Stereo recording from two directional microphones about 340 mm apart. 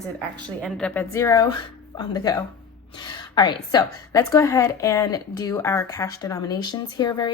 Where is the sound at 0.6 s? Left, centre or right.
Centre.